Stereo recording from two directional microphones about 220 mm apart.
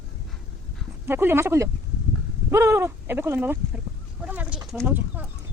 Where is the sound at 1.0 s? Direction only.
10° right (ahead or behind).